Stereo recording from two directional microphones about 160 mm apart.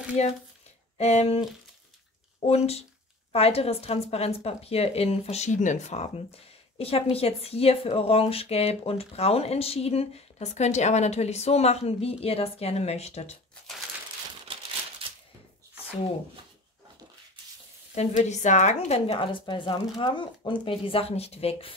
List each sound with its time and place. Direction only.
0.2 s a woman's voice: 45° left (ahead or behind)
17.9 s a woman's voice: 45° left (ahead or behind)
18.9 s a woman's voice: 35° left (ahead or behind)